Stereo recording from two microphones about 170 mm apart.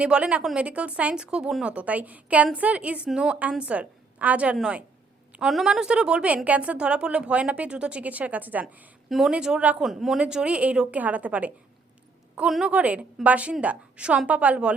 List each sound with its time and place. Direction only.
0.0 s a woman's voice: 5° right (ahead or behind)